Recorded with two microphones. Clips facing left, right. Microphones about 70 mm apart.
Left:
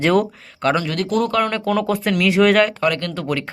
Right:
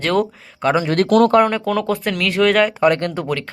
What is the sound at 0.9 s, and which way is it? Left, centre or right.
Speech, right.